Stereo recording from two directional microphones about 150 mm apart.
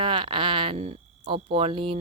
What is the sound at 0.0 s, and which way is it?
Speech, 35° right (ahead or behind).